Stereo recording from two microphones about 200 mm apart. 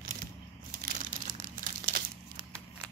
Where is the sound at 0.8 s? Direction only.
40° right (ahead or behind).